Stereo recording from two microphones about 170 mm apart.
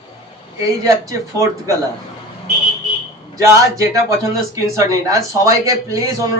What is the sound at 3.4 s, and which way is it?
A man's voice, 20° right (ahead or behind).